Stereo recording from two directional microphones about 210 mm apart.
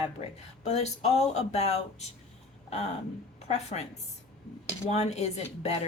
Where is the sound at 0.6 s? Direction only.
30° left (ahead or behind).